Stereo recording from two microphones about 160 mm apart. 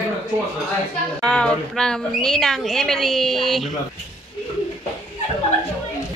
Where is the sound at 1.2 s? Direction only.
5° left (ahead or behind).